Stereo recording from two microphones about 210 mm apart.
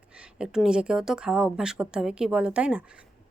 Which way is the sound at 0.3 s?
5° right (ahead or behind).